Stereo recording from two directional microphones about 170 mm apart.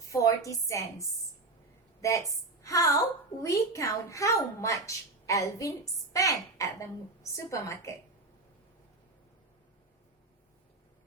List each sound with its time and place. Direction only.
0.1 s a woman's voice: 20° left (ahead or behind)